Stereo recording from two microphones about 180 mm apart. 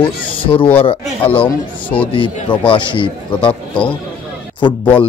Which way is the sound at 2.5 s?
25° left (ahead or behind).